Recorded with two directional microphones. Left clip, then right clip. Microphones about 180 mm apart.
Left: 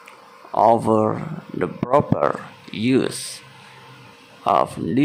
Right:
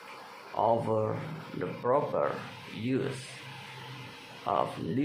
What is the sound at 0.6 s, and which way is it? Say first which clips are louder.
Speech: left 12 dB; 45° left (ahead or behind).